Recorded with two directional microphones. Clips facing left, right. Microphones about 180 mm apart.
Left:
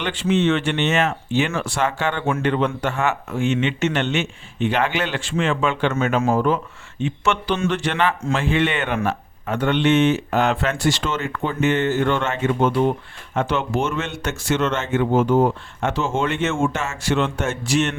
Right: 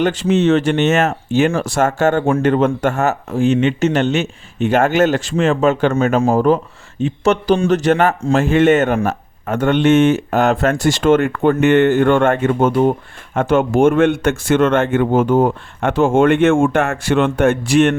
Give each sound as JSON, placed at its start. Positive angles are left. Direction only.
{"t": 0.0, "sound": "speech", "side_deg": -40}